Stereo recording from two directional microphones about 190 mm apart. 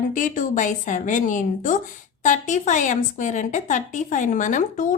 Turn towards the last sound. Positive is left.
turn(degrees=45)  # may be behind; listen again after turning